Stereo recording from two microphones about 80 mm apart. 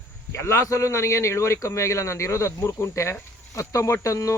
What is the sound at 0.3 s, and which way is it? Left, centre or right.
Speech, left.